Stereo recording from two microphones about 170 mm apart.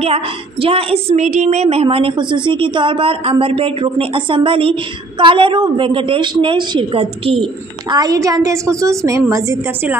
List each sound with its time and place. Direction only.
0.0 s a woman's voice: 35° right (ahead or behind)
7.9 s a woman's voice: 20° right (ahead or behind)